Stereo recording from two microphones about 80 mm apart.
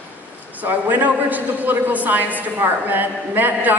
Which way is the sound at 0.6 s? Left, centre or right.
Right.